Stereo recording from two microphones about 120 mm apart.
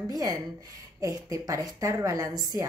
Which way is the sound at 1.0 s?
25° right (ahead or behind).